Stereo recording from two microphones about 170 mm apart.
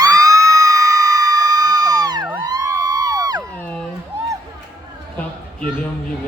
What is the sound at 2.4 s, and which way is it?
Music, 25° right (ahead or behind).